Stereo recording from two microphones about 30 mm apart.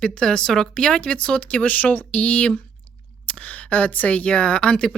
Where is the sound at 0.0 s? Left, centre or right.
Left.